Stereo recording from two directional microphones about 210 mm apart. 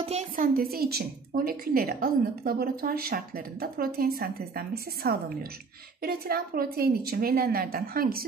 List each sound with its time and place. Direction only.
0.0 s a woman's voice: 30° right (ahead or behind)